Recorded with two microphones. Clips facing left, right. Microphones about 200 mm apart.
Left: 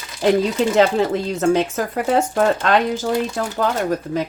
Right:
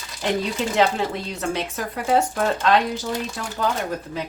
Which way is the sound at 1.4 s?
45° left (ahead or behind).